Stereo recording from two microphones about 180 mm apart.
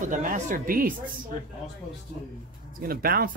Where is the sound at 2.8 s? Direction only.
55° right (ahead or behind).